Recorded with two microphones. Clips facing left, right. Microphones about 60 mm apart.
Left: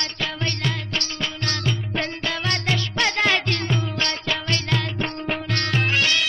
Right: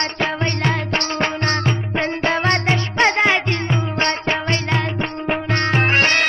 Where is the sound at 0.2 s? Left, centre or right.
Right.